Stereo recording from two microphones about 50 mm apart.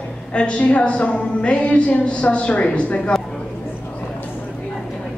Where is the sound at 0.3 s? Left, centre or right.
Left.